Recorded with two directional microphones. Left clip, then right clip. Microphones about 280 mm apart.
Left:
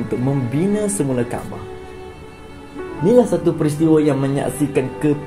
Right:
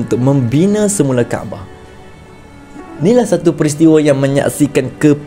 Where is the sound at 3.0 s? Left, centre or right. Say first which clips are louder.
Right 3 dB; right.